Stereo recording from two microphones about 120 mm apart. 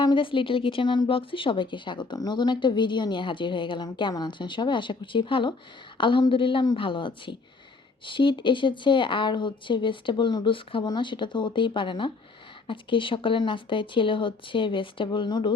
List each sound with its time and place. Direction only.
0.0 s a woman's voice: 40° left (ahead or behind)